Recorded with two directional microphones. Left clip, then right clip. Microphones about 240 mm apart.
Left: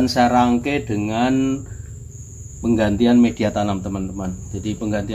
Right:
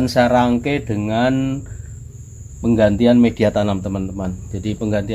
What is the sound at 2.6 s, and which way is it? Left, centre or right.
Speech, right.